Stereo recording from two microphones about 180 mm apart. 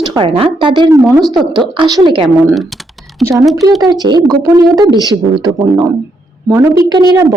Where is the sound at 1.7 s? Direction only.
25° right (ahead or behind).